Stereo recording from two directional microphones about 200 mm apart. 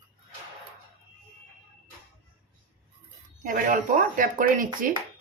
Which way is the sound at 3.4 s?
45° right (ahead or behind).